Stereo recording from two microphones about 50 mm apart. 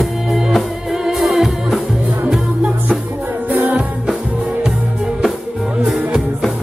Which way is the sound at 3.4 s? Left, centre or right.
Right.